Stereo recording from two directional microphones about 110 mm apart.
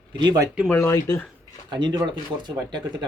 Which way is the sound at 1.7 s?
40° right (ahead or behind).